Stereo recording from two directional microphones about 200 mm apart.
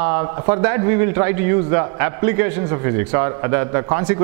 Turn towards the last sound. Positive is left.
turn(degrees=-20)  # may be behind; listen again after turning